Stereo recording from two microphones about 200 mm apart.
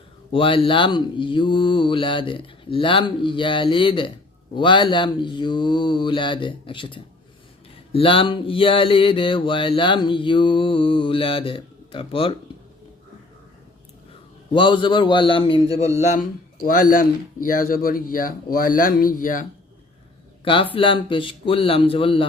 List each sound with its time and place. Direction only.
0.3 s mantra: 25° left (ahead or behind)
14.5 s mantra: 25° left (ahead or behind)
16.6 s speech: 45° left (ahead or behind)
20.4 s speech: 25° left (ahead or behind)
20.7 s mantra: 25° left (ahead or behind)